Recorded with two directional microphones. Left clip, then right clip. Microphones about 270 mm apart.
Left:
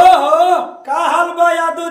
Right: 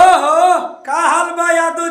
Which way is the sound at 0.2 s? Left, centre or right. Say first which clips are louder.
Even; centre.